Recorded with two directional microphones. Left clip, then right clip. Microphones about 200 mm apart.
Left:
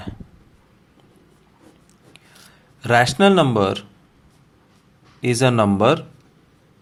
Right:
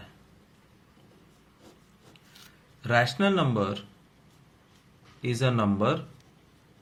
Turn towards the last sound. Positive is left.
turn(degrees=45)  # may be behind; listen again after turning